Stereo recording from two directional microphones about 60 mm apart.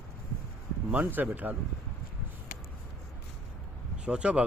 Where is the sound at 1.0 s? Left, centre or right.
Right.